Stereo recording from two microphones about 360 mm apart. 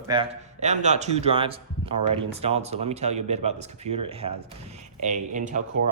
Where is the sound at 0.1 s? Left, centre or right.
Centre.